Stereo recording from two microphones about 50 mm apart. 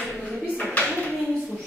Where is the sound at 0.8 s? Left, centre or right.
Centre.